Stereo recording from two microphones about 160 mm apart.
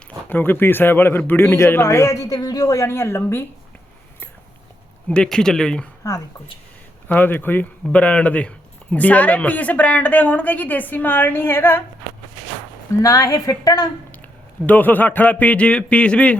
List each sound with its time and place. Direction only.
0.3 s speech: 10° left (ahead or behind)
5.0 s speech: 5° left (ahead or behind)
6.0 s speech: 20° left (ahead or behind)
13.0 s a woman's voice: 20° left (ahead or behind)
14.7 s speech: 10° left (ahead or behind)